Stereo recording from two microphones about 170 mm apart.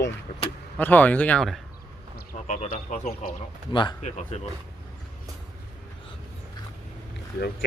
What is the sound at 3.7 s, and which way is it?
Speech, 30° left (ahead or behind).